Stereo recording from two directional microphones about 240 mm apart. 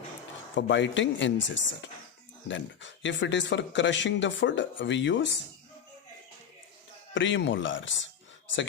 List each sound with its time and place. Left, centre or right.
0.5 s speech: left
7.1 s speech: left